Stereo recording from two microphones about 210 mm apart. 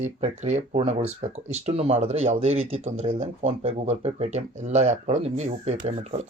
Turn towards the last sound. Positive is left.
turn(degrees=-30)  # may be behind; listen again after turning